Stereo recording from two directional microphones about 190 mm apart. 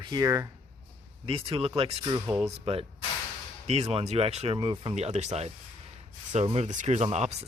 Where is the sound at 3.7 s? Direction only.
30° right (ahead or behind).